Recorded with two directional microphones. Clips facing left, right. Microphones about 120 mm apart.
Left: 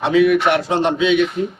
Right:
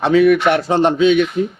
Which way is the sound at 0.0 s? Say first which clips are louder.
Right 2 dB; 45° right (ahead or behind).